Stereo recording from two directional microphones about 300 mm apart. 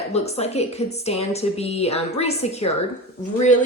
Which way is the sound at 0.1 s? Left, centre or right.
Left.